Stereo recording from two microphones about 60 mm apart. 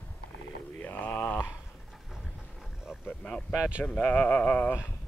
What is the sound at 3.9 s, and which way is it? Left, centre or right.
Speech, left.